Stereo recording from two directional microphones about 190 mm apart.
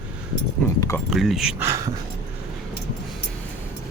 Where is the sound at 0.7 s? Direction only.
15° left (ahead or behind).